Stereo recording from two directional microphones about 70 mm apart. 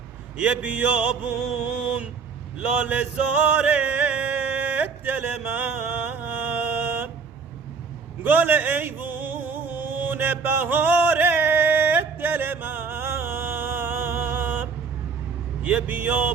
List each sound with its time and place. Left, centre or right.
0.3 s music: centre
2.6 s music: right
8.2 s a sound: right
15.6 s music: centre